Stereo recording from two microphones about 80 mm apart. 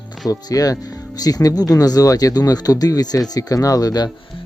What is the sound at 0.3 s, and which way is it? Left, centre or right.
Speech, left.